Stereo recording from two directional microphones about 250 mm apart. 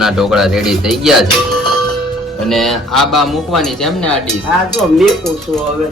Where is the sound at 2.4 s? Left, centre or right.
Centre.